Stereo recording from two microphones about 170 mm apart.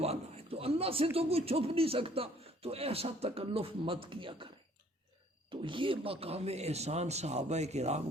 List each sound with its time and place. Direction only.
0.0 s a man's voice: 35° right (ahead or behind)
5.5 s a man's voice: 30° right (ahead or behind)